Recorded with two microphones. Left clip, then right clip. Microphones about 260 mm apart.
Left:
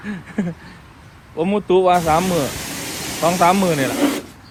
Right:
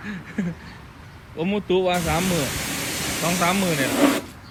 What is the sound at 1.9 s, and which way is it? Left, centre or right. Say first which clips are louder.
Speech: left 8 dB; left.